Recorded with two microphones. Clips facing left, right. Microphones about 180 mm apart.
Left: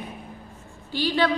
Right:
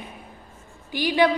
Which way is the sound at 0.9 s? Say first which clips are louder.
Right 3 dB; 15° right (ahead or behind).